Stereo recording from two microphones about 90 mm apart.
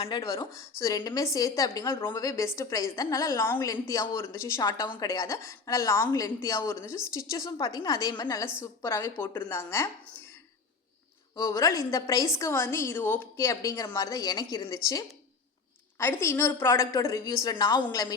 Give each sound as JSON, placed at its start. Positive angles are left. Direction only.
{"t": 0.1, "sound": "a woman's voice", "side_deg": 45}
{"t": 8.6, "sound": "a woman's voice", "side_deg": 35}
{"t": 11.3, "sound": "a woman's voice", "side_deg": 40}
{"t": 16.0, "sound": "a woman's voice", "side_deg": 25}